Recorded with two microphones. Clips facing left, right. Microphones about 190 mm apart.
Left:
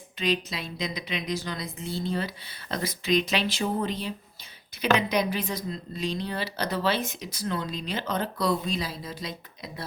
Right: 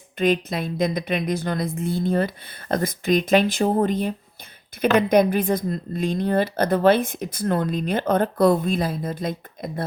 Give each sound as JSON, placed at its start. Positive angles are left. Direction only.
{"t": 0.2, "sound": "a woman's voice", "side_deg": -50}